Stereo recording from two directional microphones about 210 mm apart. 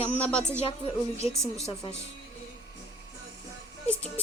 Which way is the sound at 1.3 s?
15° right (ahead or behind).